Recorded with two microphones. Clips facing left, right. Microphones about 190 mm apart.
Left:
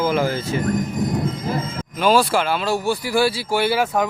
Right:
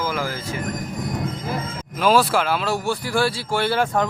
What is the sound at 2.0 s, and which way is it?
Speech, centre (ahead or behind).